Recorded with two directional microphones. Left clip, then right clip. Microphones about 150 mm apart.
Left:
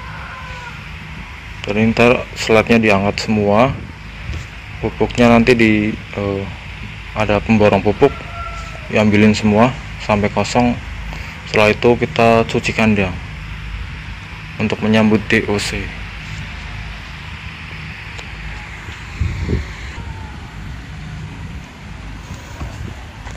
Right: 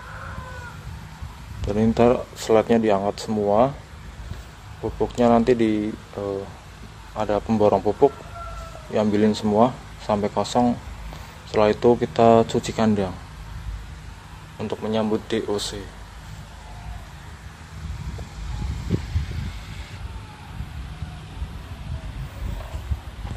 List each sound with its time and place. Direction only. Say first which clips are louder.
1.6 s speech: left 5 dB; 20° right (ahead or behind)
4.8 s speech: left 6 dB; 10° right (ahead or behind)
14.6 s speech: left 9 dB; centre (ahead or behind)